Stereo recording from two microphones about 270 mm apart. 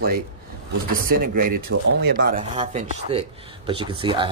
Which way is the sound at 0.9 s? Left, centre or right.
Right.